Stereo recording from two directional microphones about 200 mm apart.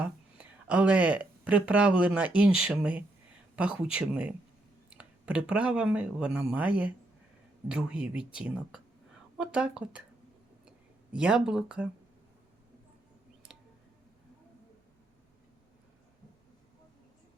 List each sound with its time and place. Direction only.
0.0 s speech: 5° right (ahead or behind)